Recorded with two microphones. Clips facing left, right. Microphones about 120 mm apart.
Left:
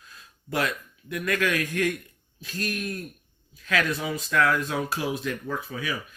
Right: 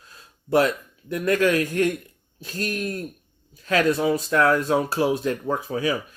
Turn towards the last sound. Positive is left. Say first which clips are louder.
# right 7 dB
turn(degrees=-35)  # may be behind; listen again after turning